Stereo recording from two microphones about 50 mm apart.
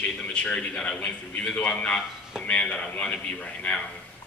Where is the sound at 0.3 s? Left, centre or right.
Left.